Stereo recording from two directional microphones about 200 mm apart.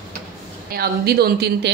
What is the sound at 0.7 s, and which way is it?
Speech, 50° right (ahead or behind).